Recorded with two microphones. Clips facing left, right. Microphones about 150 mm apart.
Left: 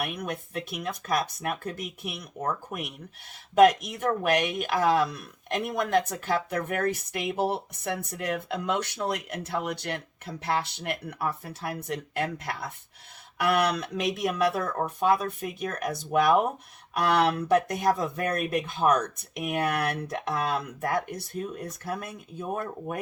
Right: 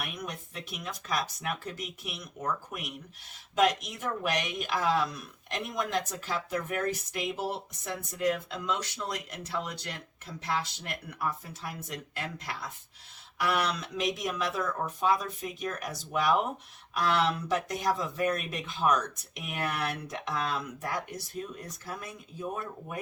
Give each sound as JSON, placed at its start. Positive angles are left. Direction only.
{"t": 0.0, "sound": "speech", "side_deg": 55}